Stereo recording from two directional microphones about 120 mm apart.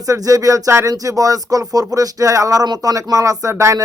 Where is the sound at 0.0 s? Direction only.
30° right (ahead or behind).